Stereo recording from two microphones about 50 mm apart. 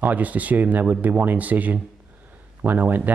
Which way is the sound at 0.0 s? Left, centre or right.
Right.